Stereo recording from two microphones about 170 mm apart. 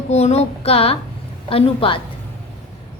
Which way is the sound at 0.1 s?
40° left (ahead or behind).